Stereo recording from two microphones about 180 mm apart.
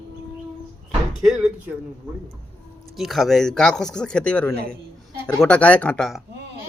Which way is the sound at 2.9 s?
Centre (ahead or behind).